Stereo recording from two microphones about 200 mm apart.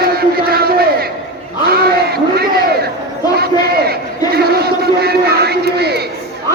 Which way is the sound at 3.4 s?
50° right (ahead or behind).